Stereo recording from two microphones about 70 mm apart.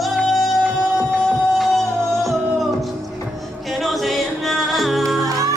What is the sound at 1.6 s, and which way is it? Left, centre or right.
Music, centre.